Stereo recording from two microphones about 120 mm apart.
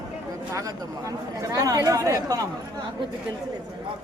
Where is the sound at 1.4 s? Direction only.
30° right (ahead or behind).